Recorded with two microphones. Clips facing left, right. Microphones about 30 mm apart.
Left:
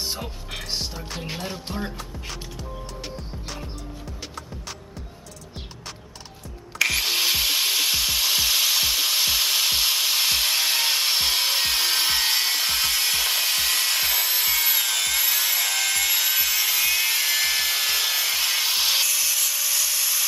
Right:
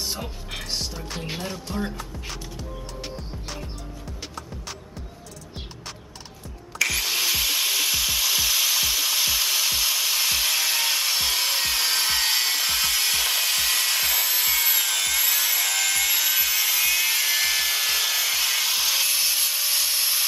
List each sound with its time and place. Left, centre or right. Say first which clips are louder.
0.0 s music: even; centre
2.0 s creak: even; centre
3.2 s music: even; centre
6.8 s music: left 2 dB; centre
19.0 s wood: even; right